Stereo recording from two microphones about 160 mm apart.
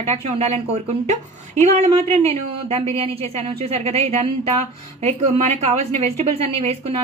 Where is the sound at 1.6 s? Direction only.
40° right (ahead or behind).